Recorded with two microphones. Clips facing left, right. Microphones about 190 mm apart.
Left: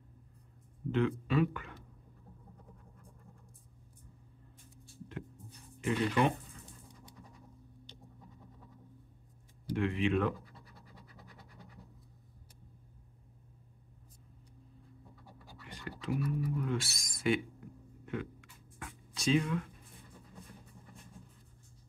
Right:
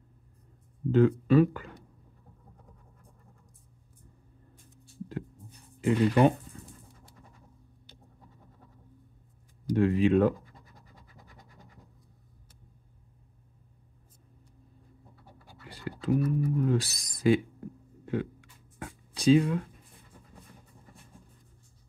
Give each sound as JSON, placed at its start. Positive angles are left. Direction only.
{"t": 0.9, "sound": "speech", "side_deg": -40}
{"t": 5.8, "sound": "speech", "side_deg": -35}
{"t": 9.7, "sound": "speech", "side_deg": -40}
{"t": 15.6, "sound": "a sound", "side_deg": -35}
{"t": 16.0, "sound": "speech", "side_deg": -40}
{"t": 18.0, "sound": "writing", "side_deg": -35}